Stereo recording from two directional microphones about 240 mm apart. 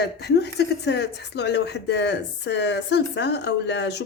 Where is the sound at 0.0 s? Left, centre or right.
Left.